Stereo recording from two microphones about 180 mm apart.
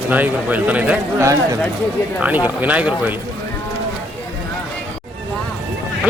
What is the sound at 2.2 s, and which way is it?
Speech, 10° right (ahead or behind).